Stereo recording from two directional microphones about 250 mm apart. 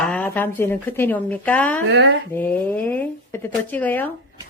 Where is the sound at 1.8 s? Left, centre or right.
Right.